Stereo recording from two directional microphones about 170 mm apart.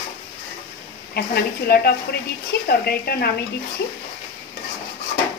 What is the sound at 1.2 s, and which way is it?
Speech, 65° left (ahead or behind).